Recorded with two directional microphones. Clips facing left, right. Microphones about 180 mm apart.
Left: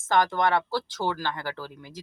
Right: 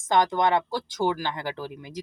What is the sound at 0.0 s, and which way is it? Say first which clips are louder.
Speech: right 1 dB; 15° right (ahead or behind).